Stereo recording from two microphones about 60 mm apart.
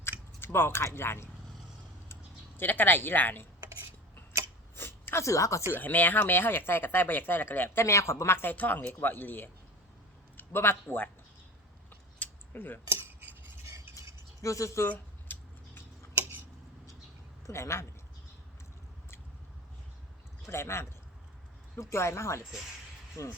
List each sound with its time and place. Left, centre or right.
0.3 s speech: left
2.6 s speech: left
4.7 s a sound: left
5.7 s speech: left
7.9 s speech: left
8.5 s speech: left
11.9 s scissors: left
13.1 s scissors: right
14.4 s speech: left
14.8 s a sound: left
17.4 s speech: left
20.5 s speech: left